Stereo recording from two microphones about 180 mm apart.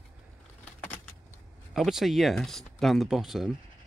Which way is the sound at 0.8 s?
10° left (ahead or behind).